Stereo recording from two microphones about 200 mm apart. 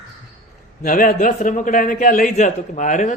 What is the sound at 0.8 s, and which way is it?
A man's voice, 45° left (ahead or behind).